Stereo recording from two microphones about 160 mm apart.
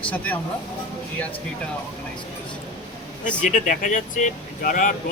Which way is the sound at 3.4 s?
55° left (ahead or behind).